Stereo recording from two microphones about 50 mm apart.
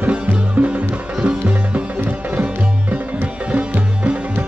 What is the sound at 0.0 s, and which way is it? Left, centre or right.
Music, right.